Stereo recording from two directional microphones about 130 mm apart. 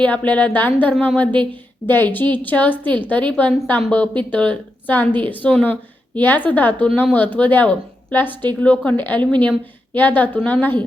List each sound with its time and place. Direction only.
0.0 s a woman's voice: 10° left (ahead or behind)